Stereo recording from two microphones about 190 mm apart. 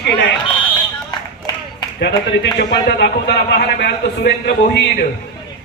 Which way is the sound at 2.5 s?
65° left (ahead or behind).